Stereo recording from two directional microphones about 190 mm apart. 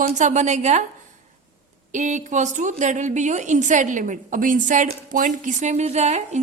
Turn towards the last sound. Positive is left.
turn(degrees=-35)  # may be behind; listen again after turning